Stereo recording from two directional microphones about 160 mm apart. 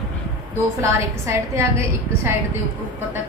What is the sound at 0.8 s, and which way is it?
A woman's voice, 15° right (ahead or behind).